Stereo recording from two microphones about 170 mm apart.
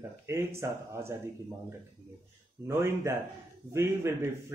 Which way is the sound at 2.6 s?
15° right (ahead or behind).